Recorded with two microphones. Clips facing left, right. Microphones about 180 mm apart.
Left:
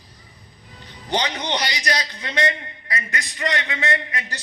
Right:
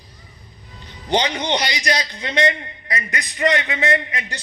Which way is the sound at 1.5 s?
10° right (ahead or behind).